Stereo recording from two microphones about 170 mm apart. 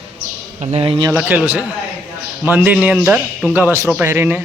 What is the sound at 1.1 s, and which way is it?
A man's voice, 10° right (ahead or behind).